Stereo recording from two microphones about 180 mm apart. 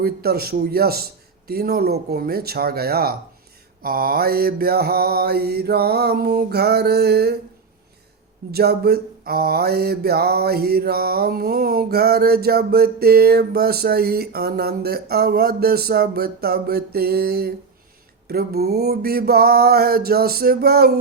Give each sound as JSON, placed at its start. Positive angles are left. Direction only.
{"t": 0.0, "sound": "mantra", "side_deg": -60}
{"t": 8.5, "sound": "mantra", "side_deg": -60}